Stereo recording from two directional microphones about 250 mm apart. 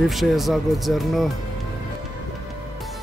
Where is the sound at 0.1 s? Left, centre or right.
Centre.